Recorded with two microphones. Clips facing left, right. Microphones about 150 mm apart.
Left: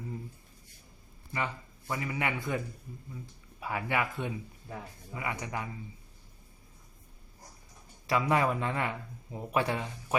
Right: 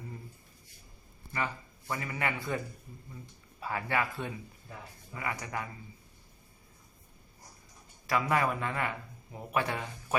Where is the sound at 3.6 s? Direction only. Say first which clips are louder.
Even; 15° left (ahead or behind).